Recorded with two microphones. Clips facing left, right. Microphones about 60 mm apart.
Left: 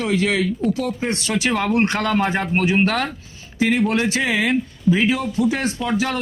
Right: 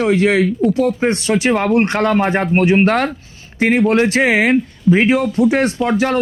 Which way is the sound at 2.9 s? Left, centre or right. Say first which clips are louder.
Right 6 dB; right.